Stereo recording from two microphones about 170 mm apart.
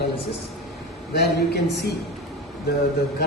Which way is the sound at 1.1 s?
75° left (ahead or behind).